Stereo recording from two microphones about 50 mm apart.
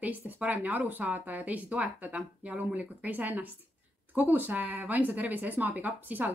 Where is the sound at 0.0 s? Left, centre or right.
Right.